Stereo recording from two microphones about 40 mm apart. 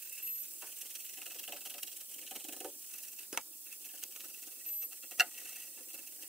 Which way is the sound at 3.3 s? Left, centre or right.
Centre.